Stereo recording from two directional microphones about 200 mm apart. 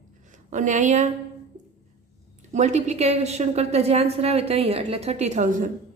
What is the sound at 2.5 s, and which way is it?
A woman's voice, 35° right (ahead or behind).